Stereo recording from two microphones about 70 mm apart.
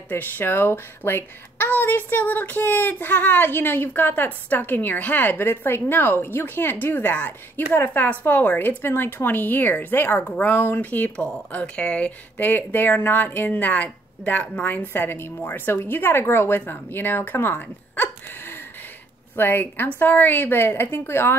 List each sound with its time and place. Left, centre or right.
0.1 s a woman's voice: left
14.7 s a woman's voice: left